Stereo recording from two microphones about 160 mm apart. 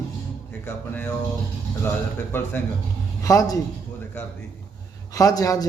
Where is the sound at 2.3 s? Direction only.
15° left (ahead or behind).